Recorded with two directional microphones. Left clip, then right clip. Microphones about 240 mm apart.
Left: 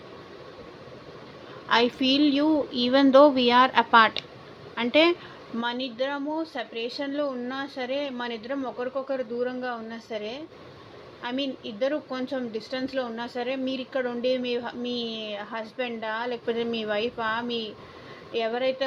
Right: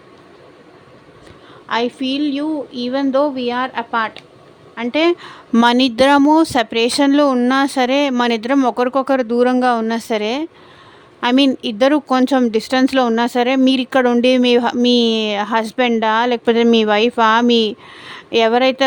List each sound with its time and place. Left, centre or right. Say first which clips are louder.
1.6 s a woman's voice: right 3 dB; centre
5.5 s speech: right 16 dB; right